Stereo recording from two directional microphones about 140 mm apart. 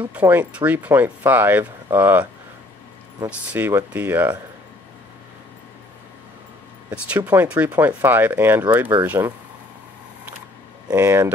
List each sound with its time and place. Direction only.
0.1 s speech: 10° right (ahead or behind)
3.3 s speech: 15° right (ahead or behind)
6.9 s speech: 10° right (ahead or behind)
10.9 s speech: 20° right (ahead or behind)